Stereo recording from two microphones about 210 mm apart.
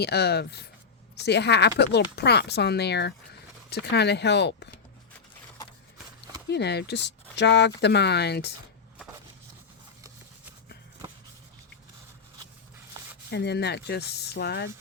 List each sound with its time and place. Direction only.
0.0 s speech: 50° left (ahead or behind)
6.5 s speech: 55° left (ahead or behind)
13.3 s speech: 55° left (ahead or behind)